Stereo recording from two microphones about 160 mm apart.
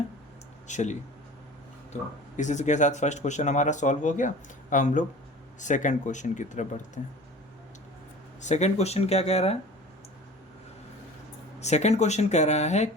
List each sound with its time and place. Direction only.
0.7 s speech: 45° left (ahead or behind)
8.4 s speech: 45° left (ahead or behind)
11.6 s speech: 45° left (ahead or behind)